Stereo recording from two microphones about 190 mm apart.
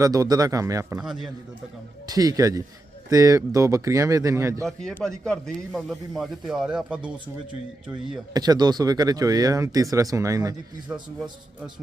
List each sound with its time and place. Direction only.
0.0 s speech: 20° right (ahead or behind)
1.0 s speech: centre (ahead or behind)
2.0 s speech: 20° right (ahead or behind)
4.6 s speech: 5° left (ahead or behind)
8.3 s speech: 20° right (ahead or behind)